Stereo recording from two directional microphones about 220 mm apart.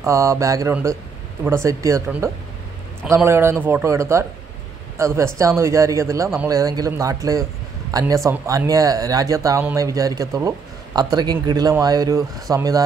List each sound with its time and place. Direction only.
0.0 s speech: 15° right (ahead or behind)